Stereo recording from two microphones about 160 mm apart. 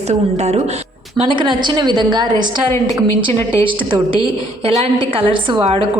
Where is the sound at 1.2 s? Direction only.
30° right (ahead or behind).